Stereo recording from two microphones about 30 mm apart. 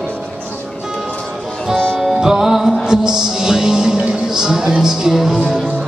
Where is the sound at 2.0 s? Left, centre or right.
Centre.